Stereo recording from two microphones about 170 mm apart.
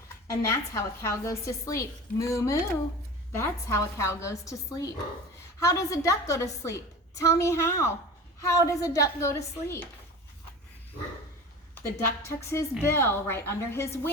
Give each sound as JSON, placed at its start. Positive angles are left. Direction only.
{"t": 0.3, "sound": "a woman's voice", "side_deg": 15}
{"t": 11.9, "sound": "a woman's voice", "side_deg": 15}